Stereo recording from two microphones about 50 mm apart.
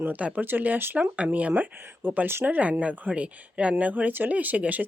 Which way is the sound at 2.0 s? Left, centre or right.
Right.